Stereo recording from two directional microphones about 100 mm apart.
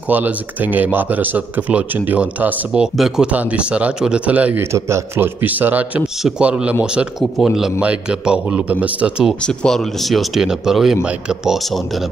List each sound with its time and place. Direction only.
0.1 s speech: 15° right (ahead or behind)
4.7 s speech: 25° right (ahead or behind)
9.5 s speech: 5° left (ahead or behind)